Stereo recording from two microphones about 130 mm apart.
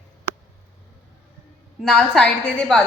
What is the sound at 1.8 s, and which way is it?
A woman's voice, 5° left (ahead or behind).